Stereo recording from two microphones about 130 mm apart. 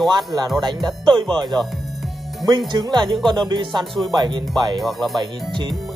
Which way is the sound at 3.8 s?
Centre (ahead or behind).